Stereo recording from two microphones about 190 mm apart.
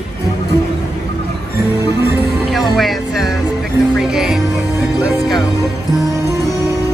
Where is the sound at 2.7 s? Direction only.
Centre (ahead or behind).